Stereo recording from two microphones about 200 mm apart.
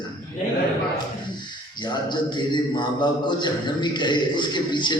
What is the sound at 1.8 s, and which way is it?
A man's voice, 20° left (ahead or behind).